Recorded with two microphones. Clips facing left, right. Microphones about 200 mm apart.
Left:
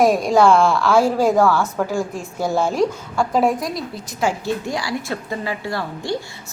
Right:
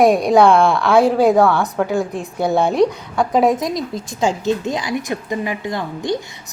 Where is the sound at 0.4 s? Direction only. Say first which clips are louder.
Right 1 dB; centre (ahead or behind).